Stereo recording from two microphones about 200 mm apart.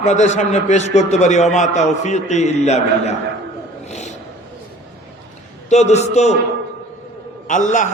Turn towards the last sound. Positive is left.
turn(degrees=40)  # may be behind; listen again after turning